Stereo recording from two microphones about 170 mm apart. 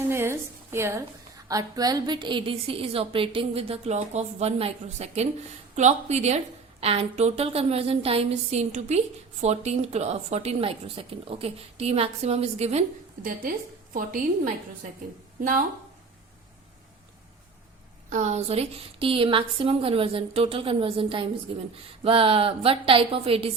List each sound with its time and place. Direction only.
0.0 s a sound: 15° right (ahead or behind)
1.5 s a woman's voice: 20° right (ahead or behind); by 12.8 s 40° right (ahead or behind)
13.9 s a woman's voice: 50° right (ahead or behind)
18.1 s a woman's voice: 45° right (ahead or behind)